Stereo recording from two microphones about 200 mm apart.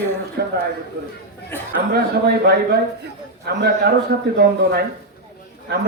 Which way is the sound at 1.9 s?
50° right (ahead or behind).